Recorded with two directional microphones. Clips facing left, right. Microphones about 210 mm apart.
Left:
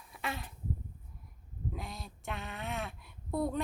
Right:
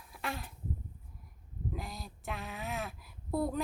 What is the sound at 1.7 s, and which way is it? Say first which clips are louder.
Speech: right 1 dB; centre (ahead or behind).